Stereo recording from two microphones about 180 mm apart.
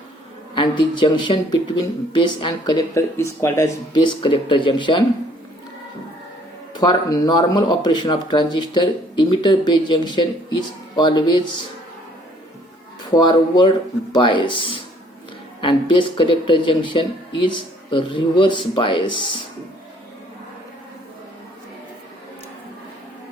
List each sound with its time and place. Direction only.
0.5 s speech: 25° left (ahead or behind)
6.7 s speech: 25° left (ahead or behind)
13.1 s speech: 25° left (ahead or behind)